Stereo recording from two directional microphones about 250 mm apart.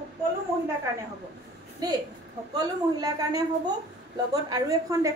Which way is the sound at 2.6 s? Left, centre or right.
Centre.